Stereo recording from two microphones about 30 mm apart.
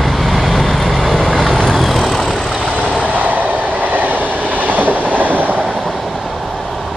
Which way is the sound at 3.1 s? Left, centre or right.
Right.